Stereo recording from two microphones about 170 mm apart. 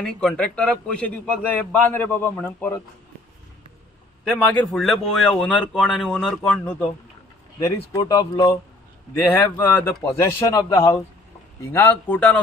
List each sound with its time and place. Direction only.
0.0 s a man's voice: 5° left (ahead or behind)
4.2 s speech: 5° left (ahead or behind)
7.6 s speech: 20° left (ahead or behind)
9.3 s a man's voice: 10° left (ahead or behind)